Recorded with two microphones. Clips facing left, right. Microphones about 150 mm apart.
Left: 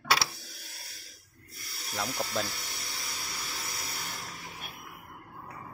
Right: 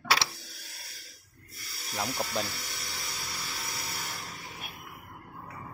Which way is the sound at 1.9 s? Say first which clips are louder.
Right 1 dB; 5° right (ahead or behind).